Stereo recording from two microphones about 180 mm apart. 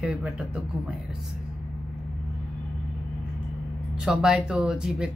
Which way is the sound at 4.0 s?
5° right (ahead or behind).